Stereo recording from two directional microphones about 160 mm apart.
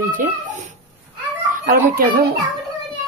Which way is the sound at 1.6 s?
65° right (ahead or behind).